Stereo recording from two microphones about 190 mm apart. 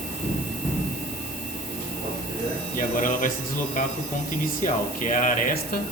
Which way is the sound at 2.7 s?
45° left (ahead or behind).